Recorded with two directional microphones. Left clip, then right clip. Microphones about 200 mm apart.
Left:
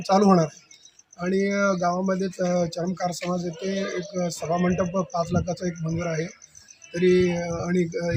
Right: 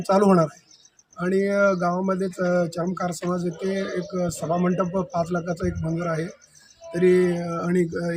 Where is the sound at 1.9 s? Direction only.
5° right (ahead or behind).